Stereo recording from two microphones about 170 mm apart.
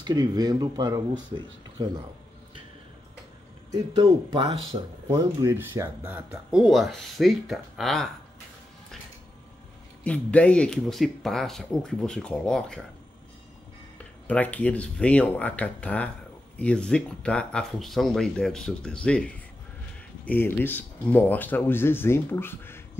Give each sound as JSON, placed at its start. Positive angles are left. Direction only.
{"t": 0.0, "sound": "speech", "side_deg": -25}
{"t": 3.7, "sound": "speech", "side_deg": -25}
{"t": 10.0, "sound": "speech", "side_deg": 5}
{"t": 14.2, "sound": "speech", "side_deg": 10}